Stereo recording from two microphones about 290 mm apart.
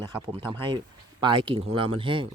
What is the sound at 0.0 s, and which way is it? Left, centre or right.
Speech, centre.